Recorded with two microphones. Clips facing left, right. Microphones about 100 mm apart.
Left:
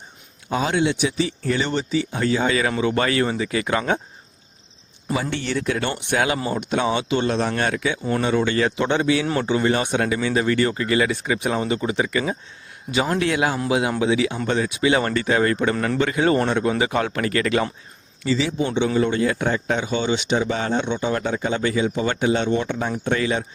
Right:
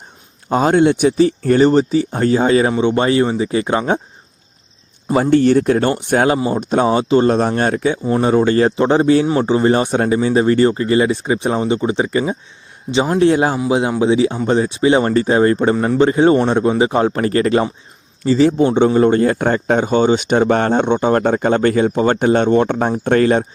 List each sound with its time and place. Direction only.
0.5 s speech: 45° right (ahead or behind); by 4.0 s 30° right (ahead or behind)
5.1 s speech: 45° right (ahead or behind)
9.2 s speech: 25° right (ahead or behind)
15.7 s a man's voice: 15° right (ahead or behind)
16.0 s speech: 30° right (ahead or behind)
18.3 s speech: 50° right (ahead or behind)